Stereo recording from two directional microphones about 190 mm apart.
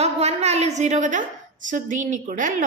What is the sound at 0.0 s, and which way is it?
A woman's voice, 35° right (ahead or behind).